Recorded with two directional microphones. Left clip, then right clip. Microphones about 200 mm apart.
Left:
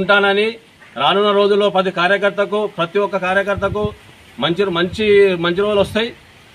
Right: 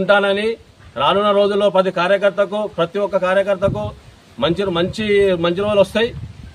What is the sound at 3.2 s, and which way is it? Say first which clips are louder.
A man's voice: right 1 dB; 25° right (ahead or behind).